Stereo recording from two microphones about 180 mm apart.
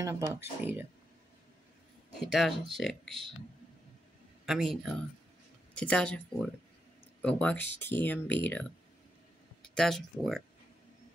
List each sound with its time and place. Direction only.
0.0 s speech: 15° right (ahead or behind)
2.1 s speech: centre (ahead or behind)
4.5 s speech: centre (ahead or behind)